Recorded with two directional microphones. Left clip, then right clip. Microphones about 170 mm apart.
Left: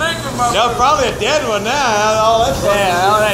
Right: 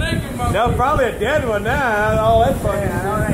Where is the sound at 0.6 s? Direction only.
45° right (ahead or behind).